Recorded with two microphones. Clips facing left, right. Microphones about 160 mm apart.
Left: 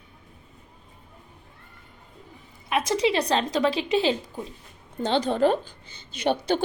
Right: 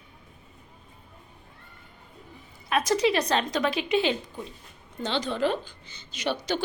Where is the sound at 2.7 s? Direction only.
25° left (ahead or behind).